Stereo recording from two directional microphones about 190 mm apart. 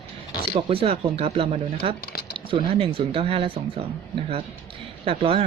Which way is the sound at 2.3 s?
25° right (ahead or behind).